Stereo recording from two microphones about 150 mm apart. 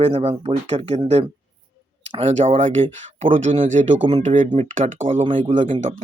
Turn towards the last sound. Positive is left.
turn(degrees=-55)  # may be behind; listen again after turning